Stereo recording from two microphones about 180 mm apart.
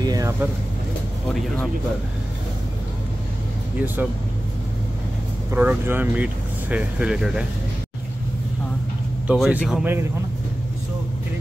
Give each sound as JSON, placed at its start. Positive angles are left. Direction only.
{"t": 0.0, "sound": "speech", "side_deg": -20}
{"t": 3.8, "sound": "speech", "side_deg": -10}
{"t": 5.5, "sound": "speech", "side_deg": -10}
{"t": 9.3, "sound": "a man's voice", "side_deg": -5}